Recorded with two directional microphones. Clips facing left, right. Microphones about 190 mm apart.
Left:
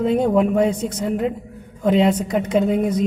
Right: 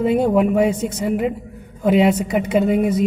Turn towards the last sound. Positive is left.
turn(degrees=-5)  # may be behind; listen again after turning